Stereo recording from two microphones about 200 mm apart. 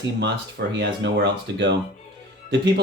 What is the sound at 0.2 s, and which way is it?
Speech, 55° right (ahead or behind).